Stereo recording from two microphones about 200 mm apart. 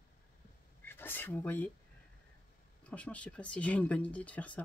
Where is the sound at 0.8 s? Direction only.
10° left (ahead or behind).